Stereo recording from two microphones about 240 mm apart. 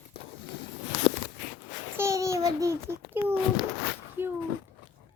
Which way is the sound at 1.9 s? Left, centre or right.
Centre.